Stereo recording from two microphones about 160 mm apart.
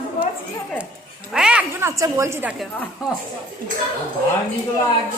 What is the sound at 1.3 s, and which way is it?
A woman's voice, 5° right (ahead or behind).